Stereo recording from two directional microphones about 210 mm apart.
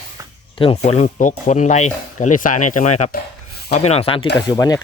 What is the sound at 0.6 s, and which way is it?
Speech, 30° left (ahead or behind).